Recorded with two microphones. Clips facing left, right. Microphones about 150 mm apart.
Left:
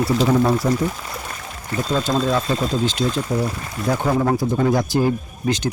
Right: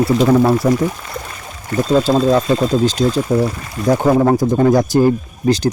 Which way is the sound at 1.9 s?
35° right (ahead or behind).